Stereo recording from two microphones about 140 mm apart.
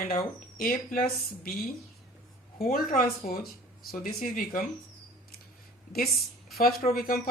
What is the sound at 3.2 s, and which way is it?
Speech, 75° left (ahead or behind).